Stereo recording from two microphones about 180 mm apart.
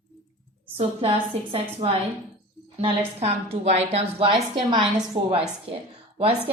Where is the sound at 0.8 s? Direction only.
30° right (ahead or behind).